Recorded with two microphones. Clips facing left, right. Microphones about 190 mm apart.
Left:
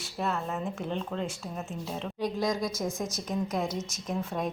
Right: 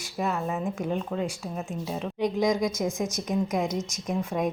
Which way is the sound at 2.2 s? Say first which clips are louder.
Right 5 dB; 20° right (ahead or behind).